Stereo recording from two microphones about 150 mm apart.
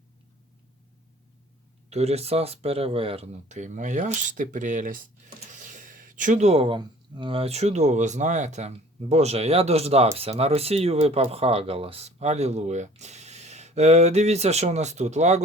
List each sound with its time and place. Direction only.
1.9 s speech: 45° right (ahead or behind)